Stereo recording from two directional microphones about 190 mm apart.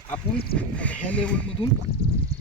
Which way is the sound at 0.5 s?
5° left (ahead or behind).